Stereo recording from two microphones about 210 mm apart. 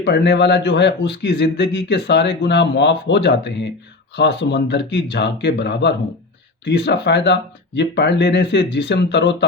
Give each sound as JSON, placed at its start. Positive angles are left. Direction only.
{"t": 0.0, "sound": "a man's voice", "side_deg": 55}